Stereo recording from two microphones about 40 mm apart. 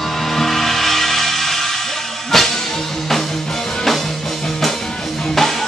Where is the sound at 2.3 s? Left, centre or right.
Centre.